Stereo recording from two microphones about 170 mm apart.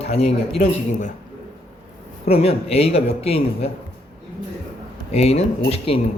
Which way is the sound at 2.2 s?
35° left (ahead or behind).